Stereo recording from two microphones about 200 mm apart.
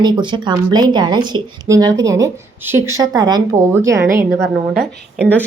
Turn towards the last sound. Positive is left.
turn(degrees=-10)  # may be behind; listen again after turning